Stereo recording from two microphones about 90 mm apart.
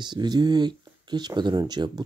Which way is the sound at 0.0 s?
55° right (ahead or behind).